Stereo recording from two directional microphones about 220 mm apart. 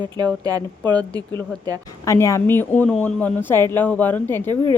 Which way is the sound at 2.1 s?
15° left (ahead or behind).